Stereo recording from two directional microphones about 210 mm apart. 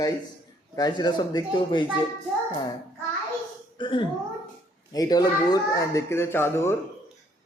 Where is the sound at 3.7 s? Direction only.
25° left (ahead or behind).